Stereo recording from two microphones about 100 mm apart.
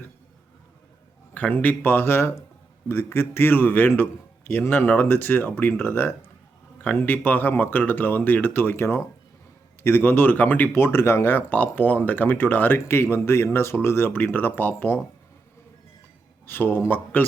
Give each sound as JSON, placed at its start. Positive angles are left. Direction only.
{"t": 1.3, "sound": "speech", "side_deg": 15}
{"t": 16.5, "sound": "speech", "side_deg": 20}